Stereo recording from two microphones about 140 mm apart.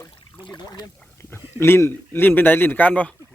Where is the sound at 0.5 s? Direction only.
30° left (ahead or behind).